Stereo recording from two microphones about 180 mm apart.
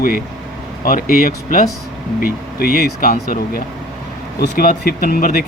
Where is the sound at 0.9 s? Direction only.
50° left (ahead or behind).